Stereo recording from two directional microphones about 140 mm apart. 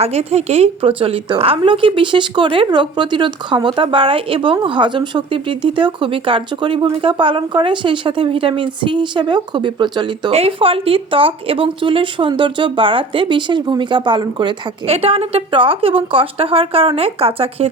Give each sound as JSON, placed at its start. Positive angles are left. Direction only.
{"t": 0.0, "sound": "speech", "side_deg": -50}
{"t": 10.3, "sound": "speech", "side_deg": -45}